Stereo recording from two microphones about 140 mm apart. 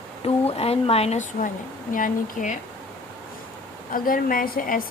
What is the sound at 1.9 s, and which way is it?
Speech, 70° left (ahead or behind).